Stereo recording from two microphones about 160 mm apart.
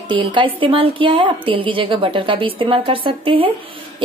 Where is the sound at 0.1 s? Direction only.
30° right (ahead or behind).